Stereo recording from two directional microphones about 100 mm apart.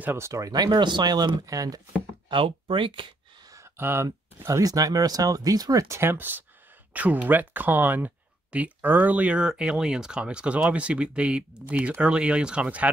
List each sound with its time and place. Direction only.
0.0 s speech: 25° right (ahead or behind)
0.5 s speech: 40° right (ahead or behind)
2.2 s speech: 60° right (ahead or behind)
3.5 s a sound: 25° right (ahead or behind)
4.5 s speech: 35° right (ahead or behind); by 12.9 s 10° right (ahead or behind)